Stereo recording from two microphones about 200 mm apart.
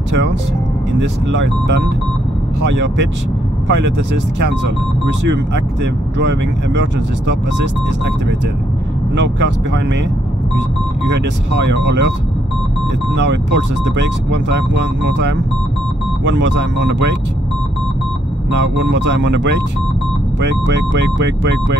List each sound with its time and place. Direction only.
1.3 s speech: 60° right (ahead or behind)
9.1 s speech: 60° right (ahead or behind)
11.1 s speech: 60° right (ahead or behind)
13.1 s speech: 60° right (ahead or behind)
18.5 s speech: 60° right (ahead or behind)